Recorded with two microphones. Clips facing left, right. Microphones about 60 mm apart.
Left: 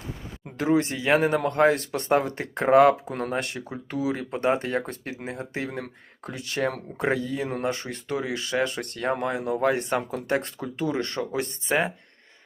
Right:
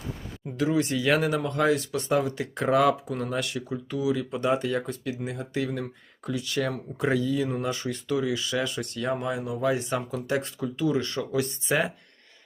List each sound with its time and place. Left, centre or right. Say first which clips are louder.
0.4 s speech: left 2 dB; left